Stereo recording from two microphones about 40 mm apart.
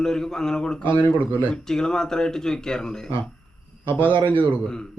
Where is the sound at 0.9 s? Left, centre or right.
Left.